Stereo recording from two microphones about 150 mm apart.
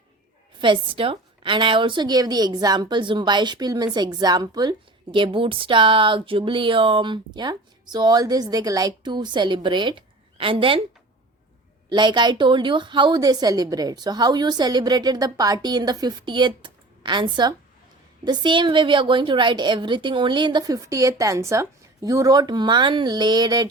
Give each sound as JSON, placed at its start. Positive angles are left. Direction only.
{"t": 0.6, "sound": "a woman's voice", "side_deg": -35}
{"t": 11.9, "sound": "a woman's voice", "side_deg": -30}